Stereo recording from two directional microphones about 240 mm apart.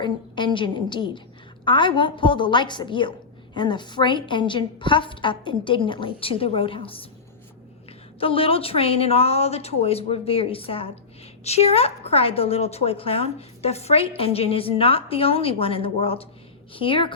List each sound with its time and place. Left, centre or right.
0.0 s a woman's voice: centre
8.2 s a woman's voice: left